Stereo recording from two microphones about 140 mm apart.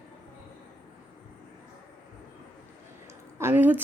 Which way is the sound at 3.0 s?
15° right (ahead or behind).